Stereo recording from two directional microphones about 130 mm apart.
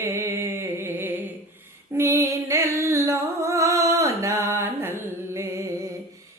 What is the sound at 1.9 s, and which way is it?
Music, 20° right (ahead or behind).